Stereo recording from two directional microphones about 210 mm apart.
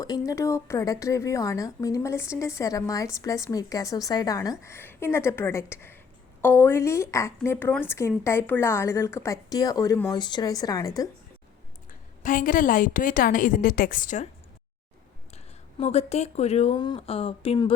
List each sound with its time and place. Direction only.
0.3 s a woman's voice: 15° left (ahead or behind)
11.9 s a woman's voice: 40° left (ahead or behind)
15.8 s speech: 30° left (ahead or behind)